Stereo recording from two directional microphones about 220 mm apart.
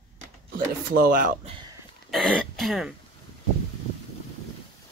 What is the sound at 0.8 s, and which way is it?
Speech, 40° right (ahead or behind).